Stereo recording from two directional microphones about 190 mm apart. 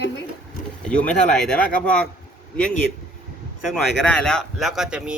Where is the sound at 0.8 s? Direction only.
5° left (ahead or behind).